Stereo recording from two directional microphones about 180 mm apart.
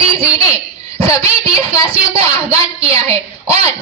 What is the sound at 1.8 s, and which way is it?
A woman's voice, 30° right (ahead or behind).